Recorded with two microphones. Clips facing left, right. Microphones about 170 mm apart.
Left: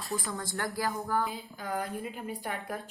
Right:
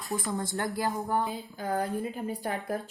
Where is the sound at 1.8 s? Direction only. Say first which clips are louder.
Right 5 dB; 35° right (ahead or behind).